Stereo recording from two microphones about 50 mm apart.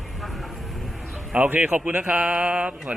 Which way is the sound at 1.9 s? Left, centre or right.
Right.